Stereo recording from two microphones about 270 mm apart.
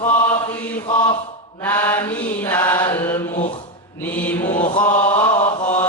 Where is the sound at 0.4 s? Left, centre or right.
Centre.